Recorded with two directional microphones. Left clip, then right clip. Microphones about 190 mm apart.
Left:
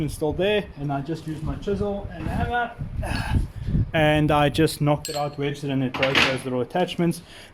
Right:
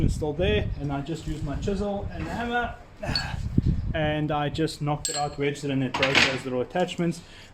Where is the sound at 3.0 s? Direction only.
40° left (ahead or behind).